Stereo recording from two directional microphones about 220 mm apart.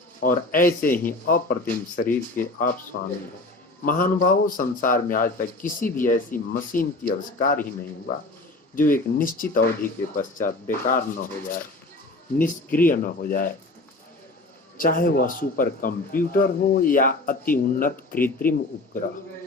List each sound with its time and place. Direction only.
0.2 s a man's voice: 40° left (ahead or behind)
2.9 s speech: 50° left (ahead or behind)
3.8 s a man's voice: 40° left (ahead or behind)
8.7 s a man's voice: 40° left (ahead or behind)
14.8 s a man's voice: 40° left (ahead or behind)